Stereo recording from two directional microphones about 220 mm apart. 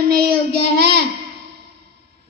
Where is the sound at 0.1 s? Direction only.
45° right (ahead or behind).